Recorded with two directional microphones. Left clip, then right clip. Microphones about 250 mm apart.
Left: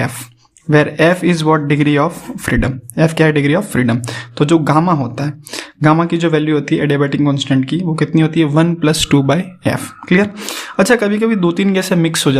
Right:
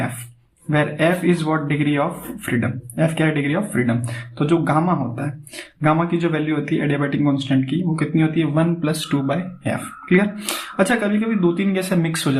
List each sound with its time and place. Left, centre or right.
0.7 s a man's voice: left